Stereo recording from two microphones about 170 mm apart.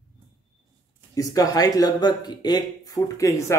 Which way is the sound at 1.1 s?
20° left (ahead or behind).